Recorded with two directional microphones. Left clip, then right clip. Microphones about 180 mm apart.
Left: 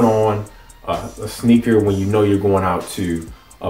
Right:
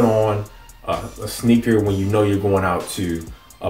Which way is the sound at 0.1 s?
5° left (ahead or behind).